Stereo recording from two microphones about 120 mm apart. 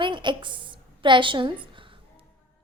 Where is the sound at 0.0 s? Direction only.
40° right (ahead or behind).